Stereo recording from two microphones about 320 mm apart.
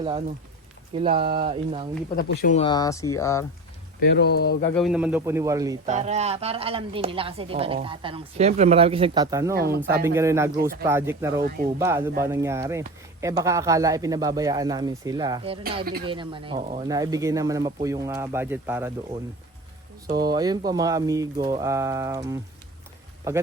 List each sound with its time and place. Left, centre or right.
0.0 s a woman's voice: centre
2.1 s speech: left; by 3.4 s centre
4.0 s speech: left
4.7 s a woman's voice: centre
9.6 s speech: right
10.2 s a woman's voice: centre
15.8 s speech: right
16.0 s a woman's voice: centre
20.1 s a woman's voice: centre